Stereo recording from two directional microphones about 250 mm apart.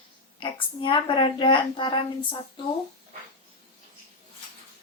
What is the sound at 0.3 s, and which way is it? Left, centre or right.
Speech, centre.